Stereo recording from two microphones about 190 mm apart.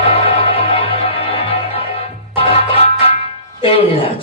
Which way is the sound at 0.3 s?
30° left (ahead or behind).